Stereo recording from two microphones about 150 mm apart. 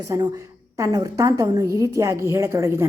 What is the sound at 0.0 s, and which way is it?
A woman's voice, 20° right (ahead or behind).